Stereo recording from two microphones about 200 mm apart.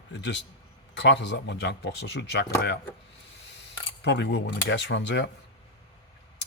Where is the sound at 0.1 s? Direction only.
60° left (ahead or behind).